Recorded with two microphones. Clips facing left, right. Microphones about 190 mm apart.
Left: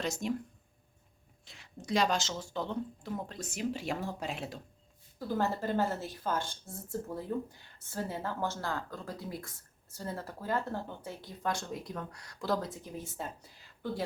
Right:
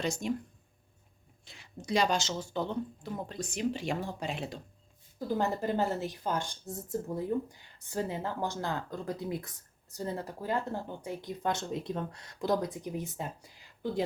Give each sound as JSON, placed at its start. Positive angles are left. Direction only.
{"t": 0.0, "sound": "speech", "side_deg": 0}
{"t": 1.5, "sound": "speech", "side_deg": 0}
{"t": 5.4, "sound": "speech", "side_deg": -15}